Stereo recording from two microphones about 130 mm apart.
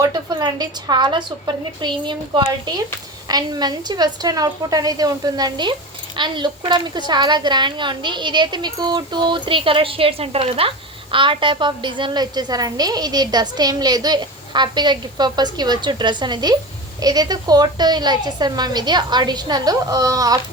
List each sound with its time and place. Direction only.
0.0 s a woman's voice: 30° right (ahead or behind)